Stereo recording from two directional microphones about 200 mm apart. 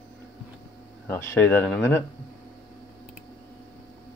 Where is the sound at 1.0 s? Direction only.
10° left (ahead or behind).